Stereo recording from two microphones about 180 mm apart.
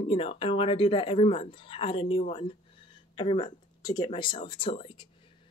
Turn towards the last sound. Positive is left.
turn(degrees=30)  # may be behind; listen again after turning